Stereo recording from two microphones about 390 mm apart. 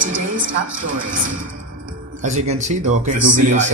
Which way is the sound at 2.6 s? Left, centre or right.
Centre.